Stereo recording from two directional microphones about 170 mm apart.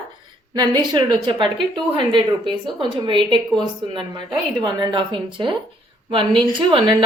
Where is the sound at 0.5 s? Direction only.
25° right (ahead or behind).